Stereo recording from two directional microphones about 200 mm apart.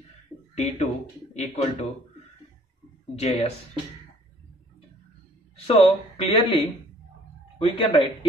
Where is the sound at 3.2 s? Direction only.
30° left (ahead or behind).